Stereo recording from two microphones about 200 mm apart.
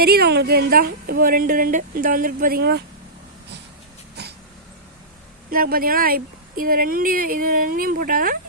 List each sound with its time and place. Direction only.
0.0 s speech: 50° right (ahead or behind)
4.2 s a sound: 55° right (ahead or behind)
5.5 s speech: 45° right (ahead or behind)